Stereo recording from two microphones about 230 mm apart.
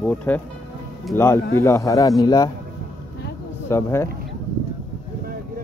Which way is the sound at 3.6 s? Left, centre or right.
Centre.